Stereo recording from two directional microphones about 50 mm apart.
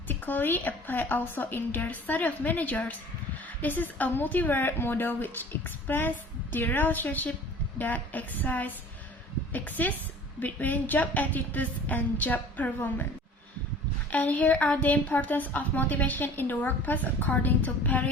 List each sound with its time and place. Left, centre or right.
0.1 s a woman's voice: left
14.1 s a woman's voice: left